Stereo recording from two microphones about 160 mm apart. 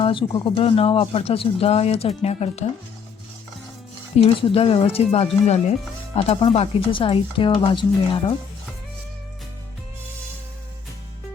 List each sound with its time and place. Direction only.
0.0 s speech: 30° left (ahead or behind)
4.2 s speech: 35° left (ahead or behind)